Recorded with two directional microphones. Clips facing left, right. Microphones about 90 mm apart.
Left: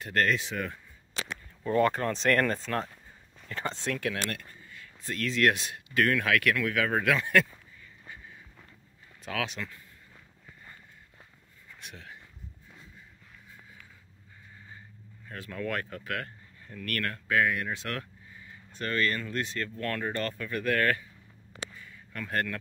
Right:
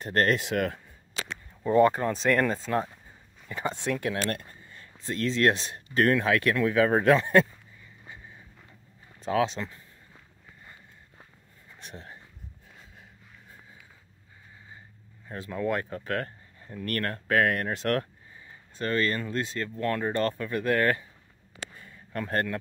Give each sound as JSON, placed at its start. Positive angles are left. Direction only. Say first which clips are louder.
{"t": 0.0, "sound": "speech", "louder": "right 3 dB", "side_deg": -40}
{"t": 1.6, "sound": "speech", "louder": "right 4 dB", "side_deg": -20}
{"t": 8.0, "sound": "a sound", "louder": "even", "side_deg": -20}
{"t": 9.2, "sound": "speech", "louder": "right 8 dB", "side_deg": -30}
{"t": 11.8, "sound": "a sound", "louder": "right 3 dB", "side_deg": -35}
{"t": 15.2, "sound": "speech", "louder": "right 5 dB", "side_deg": -20}
{"t": 16.0, "sound": "speech", "louder": "right 4 dB", "side_deg": -35}
{"t": 18.5, "sound": "speech", "louder": "right 4 dB", "side_deg": -25}
{"t": 21.7, "sound": "a sound", "louder": "right 6 dB", "side_deg": -40}